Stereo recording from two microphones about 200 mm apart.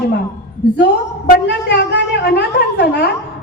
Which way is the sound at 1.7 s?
55° left (ahead or behind).